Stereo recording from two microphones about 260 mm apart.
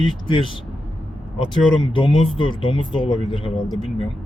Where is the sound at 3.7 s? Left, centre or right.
Centre.